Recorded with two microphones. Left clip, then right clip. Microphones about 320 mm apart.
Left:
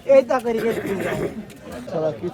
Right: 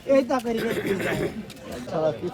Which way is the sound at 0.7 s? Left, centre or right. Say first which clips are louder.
Left 2 dB; centre.